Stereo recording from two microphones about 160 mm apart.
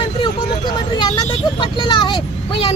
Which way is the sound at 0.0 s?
30° left (ahead or behind).